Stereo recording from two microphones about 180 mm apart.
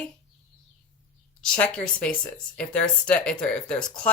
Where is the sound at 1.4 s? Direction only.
5° left (ahead or behind).